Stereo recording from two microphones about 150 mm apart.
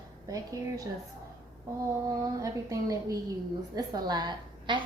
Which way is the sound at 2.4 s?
20° right (ahead or behind).